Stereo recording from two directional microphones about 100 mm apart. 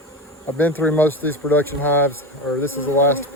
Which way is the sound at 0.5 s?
15° left (ahead or behind).